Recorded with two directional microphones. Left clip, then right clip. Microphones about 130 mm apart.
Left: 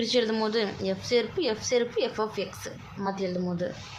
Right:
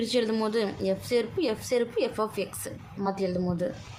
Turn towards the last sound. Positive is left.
turn(degrees=-30)  # may be behind; listen again after turning